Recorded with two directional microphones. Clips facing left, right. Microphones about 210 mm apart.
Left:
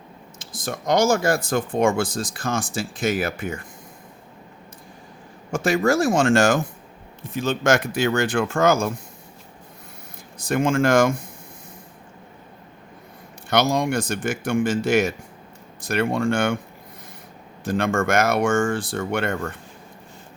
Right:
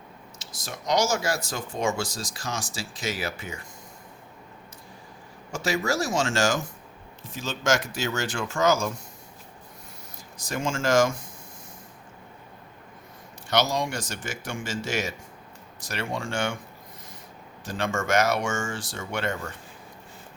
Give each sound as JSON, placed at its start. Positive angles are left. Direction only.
{"t": 0.3, "sound": "speech", "side_deg": 50}
{"t": 5.5, "sound": "speech", "side_deg": 55}
{"t": 10.3, "sound": "speech", "side_deg": 55}
{"t": 13.5, "sound": "speech", "side_deg": 55}
{"t": 17.7, "sound": "speech", "side_deg": 55}